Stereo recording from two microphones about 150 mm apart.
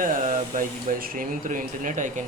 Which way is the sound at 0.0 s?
65° right (ahead or behind).